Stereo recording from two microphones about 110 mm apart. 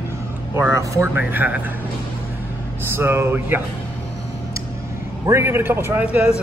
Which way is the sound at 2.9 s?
20° right (ahead or behind).